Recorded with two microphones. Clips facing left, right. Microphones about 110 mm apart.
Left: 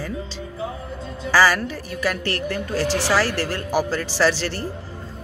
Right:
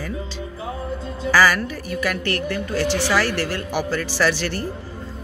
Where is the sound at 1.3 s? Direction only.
30° left (ahead or behind).